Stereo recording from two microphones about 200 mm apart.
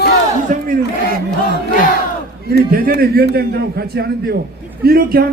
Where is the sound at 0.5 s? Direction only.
40° right (ahead or behind).